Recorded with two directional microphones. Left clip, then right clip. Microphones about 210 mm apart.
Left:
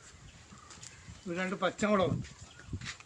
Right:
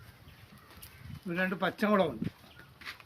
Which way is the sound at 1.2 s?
55° right (ahead or behind).